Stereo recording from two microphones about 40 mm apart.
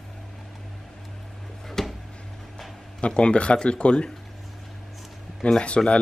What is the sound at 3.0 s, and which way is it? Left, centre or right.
Speech, left.